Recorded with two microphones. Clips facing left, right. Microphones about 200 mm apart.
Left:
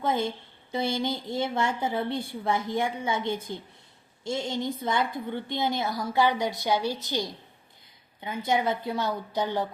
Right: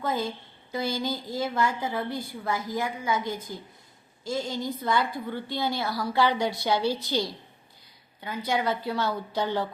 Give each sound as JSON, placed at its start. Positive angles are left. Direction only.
{"t": 0.0, "sound": "a woman's voice", "side_deg": 25}